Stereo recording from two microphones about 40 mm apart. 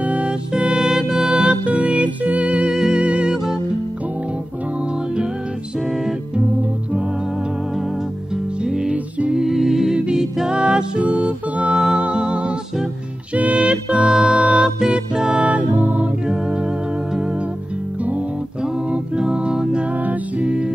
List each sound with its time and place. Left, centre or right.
0.0 s music: right
0.5 s music: centre
1.3 s music: right
1.7 s music: right
2.7 s music: centre
8.6 s music: centre
9.9 s music: right
13.3 s music: right
14.6 s music: centre
15.4 s music: right
18.9 s music: right
20.1 s music: right